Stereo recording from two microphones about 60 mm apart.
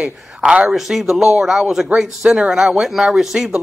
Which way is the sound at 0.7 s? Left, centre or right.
Centre.